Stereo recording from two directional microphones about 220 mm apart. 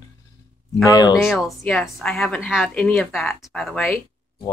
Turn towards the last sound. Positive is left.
turn(degrees=5)  # may be behind; listen again after turning